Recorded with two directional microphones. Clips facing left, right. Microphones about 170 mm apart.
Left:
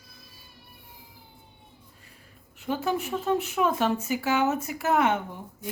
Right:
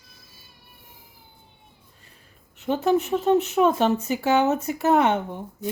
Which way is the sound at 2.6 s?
25° right (ahead or behind).